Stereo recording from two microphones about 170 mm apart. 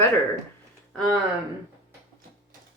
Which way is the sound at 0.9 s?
5° left (ahead or behind).